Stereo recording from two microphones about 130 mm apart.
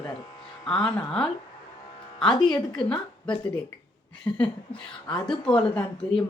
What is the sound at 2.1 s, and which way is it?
A woman's voice, 5° left (ahead or behind).